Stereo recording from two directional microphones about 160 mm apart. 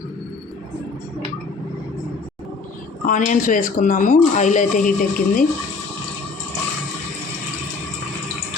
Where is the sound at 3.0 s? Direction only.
55° left (ahead or behind).